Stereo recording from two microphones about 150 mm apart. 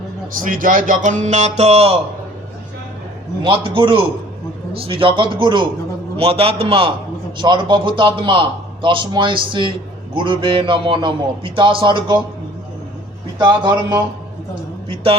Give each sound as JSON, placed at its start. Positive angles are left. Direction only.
{"t": 0.3, "sound": "speech", "side_deg": -65}
{"t": 3.4, "sound": "a man's voice", "side_deg": -35}
{"t": 13.4, "sound": "speech", "side_deg": -30}